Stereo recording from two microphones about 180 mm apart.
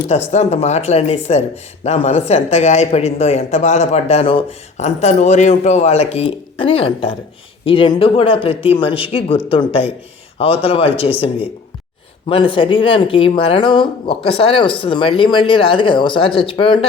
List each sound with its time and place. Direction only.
0.3 s speech: 35° left (ahead or behind)